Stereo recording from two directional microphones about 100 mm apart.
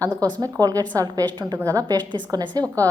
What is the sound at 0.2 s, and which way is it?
A woman's voice, 40° right (ahead or behind).